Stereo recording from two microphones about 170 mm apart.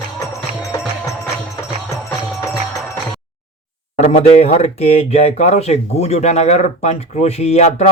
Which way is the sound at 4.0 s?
40° left (ahead or behind).